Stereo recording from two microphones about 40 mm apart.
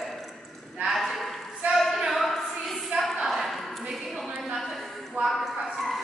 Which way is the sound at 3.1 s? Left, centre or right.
Centre.